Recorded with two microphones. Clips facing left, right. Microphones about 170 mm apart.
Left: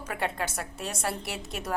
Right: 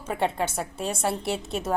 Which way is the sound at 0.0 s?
25° right (ahead or behind).